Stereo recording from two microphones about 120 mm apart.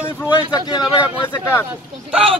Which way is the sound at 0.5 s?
35° left (ahead or behind).